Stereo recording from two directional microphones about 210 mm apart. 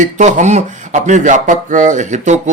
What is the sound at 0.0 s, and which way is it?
Speech, 35° right (ahead or behind).